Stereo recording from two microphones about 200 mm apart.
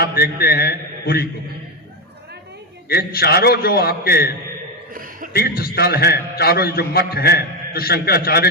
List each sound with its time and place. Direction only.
0.0 s a man's voice: 50° left (ahead or behind)
2.9 s a man's voice: 50° left (ahead or behind)